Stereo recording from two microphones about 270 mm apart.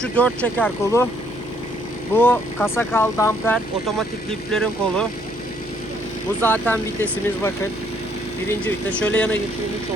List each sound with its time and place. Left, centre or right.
0.0 s speech: centre
2.1 s speech: centre
6.4 s speech: centre